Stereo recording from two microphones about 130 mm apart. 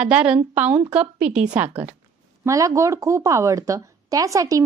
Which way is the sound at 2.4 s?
25° right (ahead or behind).